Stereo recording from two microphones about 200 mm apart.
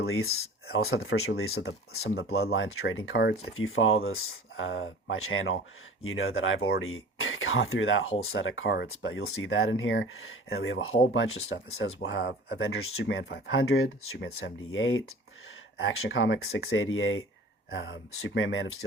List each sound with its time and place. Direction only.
0.1 s speech: 90° left
3.1 s speech: 75° left (ahead or behind)
12.0 s speech: 65° left (ahead or behind); by 17.2 s 85° left
17.7 s speech: 70° left (ahead or behind)